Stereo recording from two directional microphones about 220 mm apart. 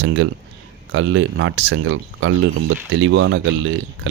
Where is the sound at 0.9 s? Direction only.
65° right (ahead or behind).